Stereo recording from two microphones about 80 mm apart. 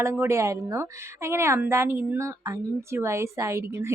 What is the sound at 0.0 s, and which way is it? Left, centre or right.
A woman's voice, right.